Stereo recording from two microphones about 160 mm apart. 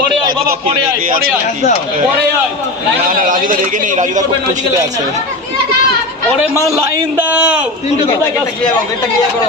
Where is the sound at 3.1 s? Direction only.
60° right (ahead or behind).